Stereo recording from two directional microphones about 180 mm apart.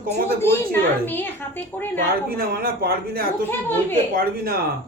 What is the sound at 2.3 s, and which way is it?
A man's voice, 55° right (ahead or behind).